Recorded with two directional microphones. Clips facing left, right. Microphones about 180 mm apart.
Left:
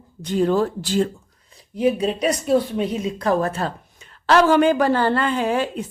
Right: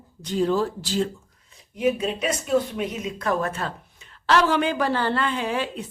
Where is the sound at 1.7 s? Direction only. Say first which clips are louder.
Left 4 dB; 35° left (ahead or behind).